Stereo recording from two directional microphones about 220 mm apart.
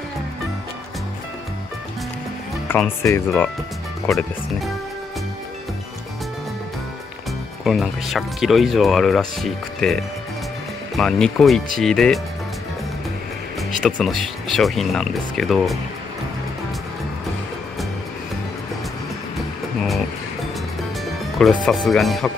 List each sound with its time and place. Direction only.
2.7 s speech: 10° left (ahead or behind)
7.6 s speech: centre (ahead or behind)
13.6 s speech: centre (ahead or behind)
21.0 s music: centre (ahead or behind)
21.6 s speech: centre (ahead or behind)